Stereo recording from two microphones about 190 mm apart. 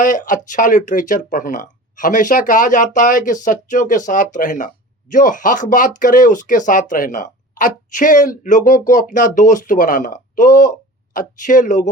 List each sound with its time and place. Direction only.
0.0 s speech: 40° left (ahead or behind)